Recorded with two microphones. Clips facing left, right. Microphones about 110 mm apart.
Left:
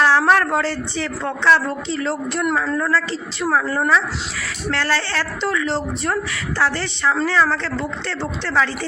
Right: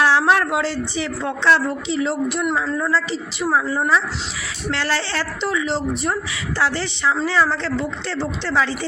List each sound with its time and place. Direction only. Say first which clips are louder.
0.0 s a sound: left 1 dB; 15° right (ahead or behind)
0.9 s a woman's voice: even; 15° right (ahead or behind)
4.7 s speech: left 1 dB; 20° right (ahead or behind)